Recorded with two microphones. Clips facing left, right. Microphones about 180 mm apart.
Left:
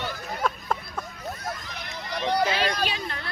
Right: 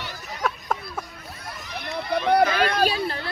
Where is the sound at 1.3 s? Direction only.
50° left (ahead or behind).